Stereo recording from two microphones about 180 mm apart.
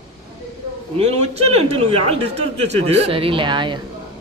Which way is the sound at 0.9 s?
35° right (ahead or behind).